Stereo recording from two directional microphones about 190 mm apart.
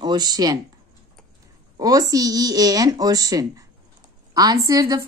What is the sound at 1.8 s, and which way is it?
A woman's voice, 20° right (ahead or behind).